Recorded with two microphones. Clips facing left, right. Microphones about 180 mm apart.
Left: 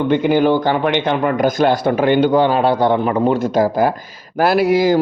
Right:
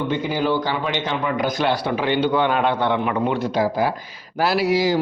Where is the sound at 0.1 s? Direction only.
60° left (ahead or behind).